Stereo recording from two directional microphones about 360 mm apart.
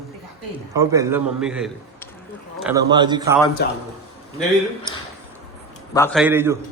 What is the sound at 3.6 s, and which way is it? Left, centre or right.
Speech, left.